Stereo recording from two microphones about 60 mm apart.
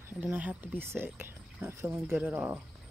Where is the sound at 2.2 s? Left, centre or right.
Right.